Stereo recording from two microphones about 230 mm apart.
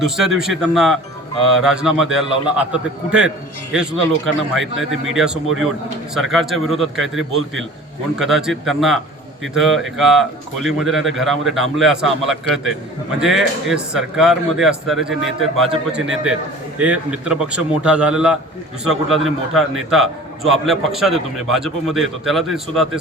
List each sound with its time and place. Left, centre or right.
0.0 s speech: centre